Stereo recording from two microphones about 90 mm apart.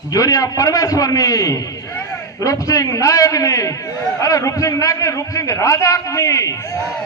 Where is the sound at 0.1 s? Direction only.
40° left (ahead or behind).